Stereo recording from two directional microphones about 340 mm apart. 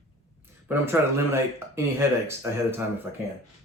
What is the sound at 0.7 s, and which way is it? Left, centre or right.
Speech, centre.